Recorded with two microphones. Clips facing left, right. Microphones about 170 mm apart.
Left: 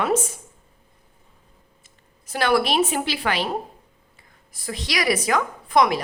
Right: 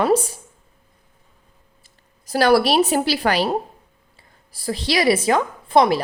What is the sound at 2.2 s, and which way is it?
A woman's voice, 35° right (ahead or behind).